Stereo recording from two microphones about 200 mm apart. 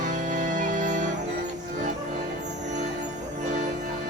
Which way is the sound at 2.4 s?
35° right (ahead or behind).